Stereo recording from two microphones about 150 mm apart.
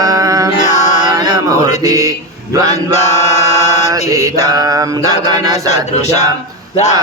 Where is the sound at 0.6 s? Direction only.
50° left (ahead or behind).